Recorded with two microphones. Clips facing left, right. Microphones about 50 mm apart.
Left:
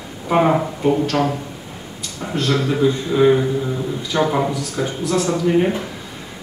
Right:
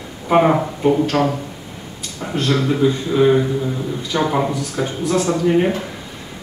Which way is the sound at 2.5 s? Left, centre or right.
Centre.